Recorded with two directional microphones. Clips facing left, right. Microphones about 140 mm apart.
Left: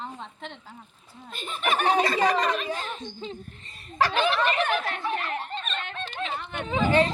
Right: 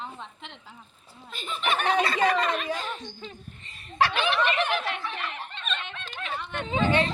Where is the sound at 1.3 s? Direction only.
45° left (ahead or behind).